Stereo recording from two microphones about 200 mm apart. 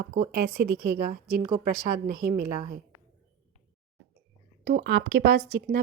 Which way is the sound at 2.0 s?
50° right (ahead or behind).